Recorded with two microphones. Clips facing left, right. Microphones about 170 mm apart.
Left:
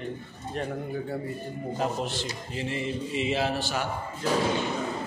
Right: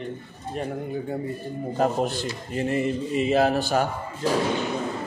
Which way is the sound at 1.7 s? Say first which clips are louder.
Right 7 dB; 50° right (ahead or behind).